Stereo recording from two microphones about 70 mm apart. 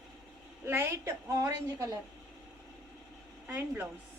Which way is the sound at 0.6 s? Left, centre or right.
Right.